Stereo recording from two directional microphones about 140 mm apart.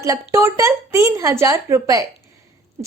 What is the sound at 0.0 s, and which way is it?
A woman's voice, 20° right (ahead or behind).